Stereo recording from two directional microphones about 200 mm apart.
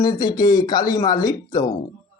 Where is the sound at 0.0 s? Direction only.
20° left (ahead or behind).